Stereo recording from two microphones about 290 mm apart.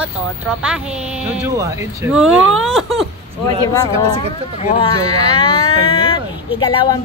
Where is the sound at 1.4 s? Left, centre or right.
Centre.